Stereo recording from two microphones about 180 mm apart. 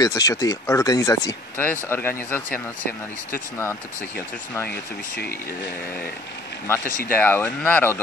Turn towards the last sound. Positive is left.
turn(degrees=10)  # may be behind; listen again after turning